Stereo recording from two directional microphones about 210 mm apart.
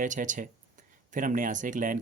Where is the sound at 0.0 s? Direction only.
35° right (ahead or behind).